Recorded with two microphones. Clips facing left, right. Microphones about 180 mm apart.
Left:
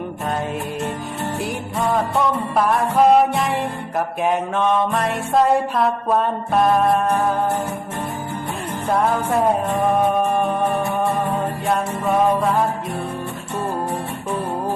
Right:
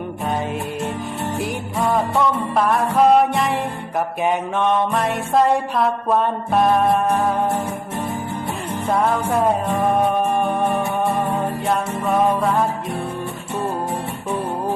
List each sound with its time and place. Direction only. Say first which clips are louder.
1.4 s music: right 1 dB; centre (ahead or behind)
8.9 s music: even; centre (ahead or behind)